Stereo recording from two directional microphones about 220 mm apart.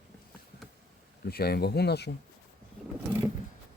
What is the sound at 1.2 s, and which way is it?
Speech, 45° left (ahead or behind).